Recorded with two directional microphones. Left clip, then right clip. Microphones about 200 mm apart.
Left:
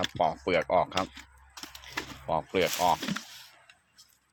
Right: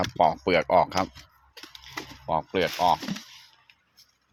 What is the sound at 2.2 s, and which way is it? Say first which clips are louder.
Speech: right 2 dB; 10° right (ahead or behind).